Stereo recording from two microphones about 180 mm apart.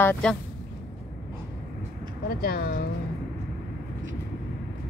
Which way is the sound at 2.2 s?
60° left (ahead or behind).